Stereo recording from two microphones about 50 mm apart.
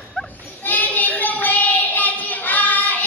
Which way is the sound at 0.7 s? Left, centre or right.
Left.